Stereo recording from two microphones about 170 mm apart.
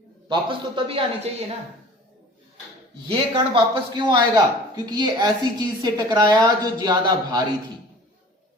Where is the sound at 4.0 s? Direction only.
25° right (ahead or behind).